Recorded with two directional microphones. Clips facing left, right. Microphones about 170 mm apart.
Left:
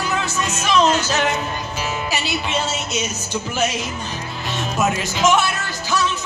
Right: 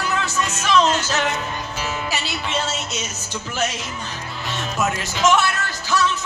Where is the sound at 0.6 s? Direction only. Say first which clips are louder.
Left 1 dB; 15° left (ahead or behind).